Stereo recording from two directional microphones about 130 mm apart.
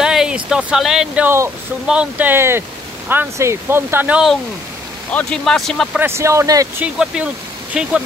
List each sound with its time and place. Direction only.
0.0 s speech: 5° right (ahead or behind)
5.1 s speech: 5° left (ahead or behind)
5.9 s speech: 20° right (ahead or behind)
6.8 s speech: 5° right (ahead or behind)